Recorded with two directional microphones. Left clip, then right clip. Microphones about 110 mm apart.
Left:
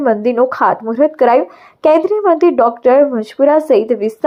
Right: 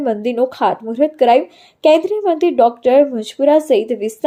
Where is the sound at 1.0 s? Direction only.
50° left (ahead or behind).